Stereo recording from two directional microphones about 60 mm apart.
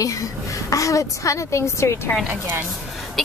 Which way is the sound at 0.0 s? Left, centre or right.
Left.